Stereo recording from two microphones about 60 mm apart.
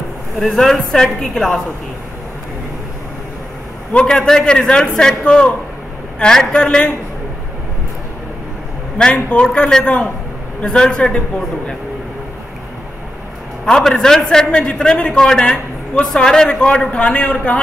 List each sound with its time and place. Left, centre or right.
0.4 s a woman's voice: centre
3.9 s a man's voice: centre
8.9 s a man's voice: centre
13.7 s a man's voice: centre
15.5 s a sound: centre
16.2 s a man's voice: centre